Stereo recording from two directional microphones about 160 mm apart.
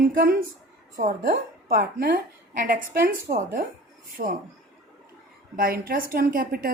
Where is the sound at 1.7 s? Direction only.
65° right (ahead or behind).